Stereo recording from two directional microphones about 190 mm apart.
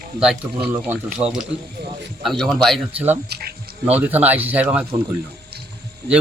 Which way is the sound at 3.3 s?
55° right (ahead or behind).